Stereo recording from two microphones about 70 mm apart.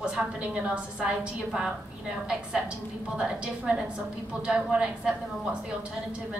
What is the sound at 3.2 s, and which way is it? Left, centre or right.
A woman's voice, centre.